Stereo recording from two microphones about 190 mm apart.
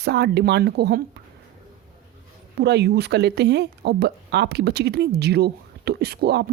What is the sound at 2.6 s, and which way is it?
Speech, 60° right (ahead or behind).